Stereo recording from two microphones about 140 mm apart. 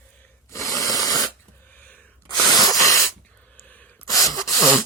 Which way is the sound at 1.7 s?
10° left (ahead or behind).